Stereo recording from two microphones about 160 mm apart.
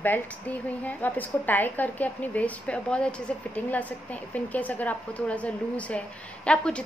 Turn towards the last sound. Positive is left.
turn(degrees=5)  # may be behind; listen again after turning